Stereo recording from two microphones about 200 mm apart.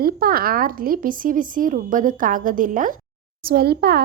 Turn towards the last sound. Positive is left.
turn(degrees=-50)  # may be behind; listen again after turning